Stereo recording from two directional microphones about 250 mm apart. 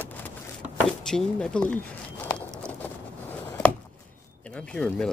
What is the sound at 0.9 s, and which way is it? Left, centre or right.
Speech, centre.